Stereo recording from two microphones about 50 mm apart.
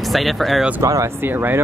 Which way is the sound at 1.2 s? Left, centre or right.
Right.